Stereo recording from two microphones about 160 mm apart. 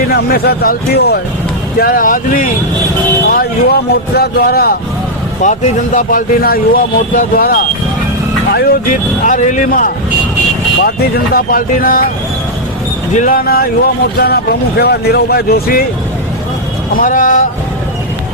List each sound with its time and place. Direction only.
0.1 s speech: 75° left (ahead or behind)
1.8 s speech: 65° left (ahead or behind)
3.2 s speech: 75° left (ahead or behind)
5.4 s speech: 50° left (ahead or behind)
10.8 s speech: 70° left (ahead or behind)
13.1 s speech: 60° left (ahead or behind)
14.2 s speech: 75° left (ahead or behind)
17.0 s speech: 55° left (ahead or behind)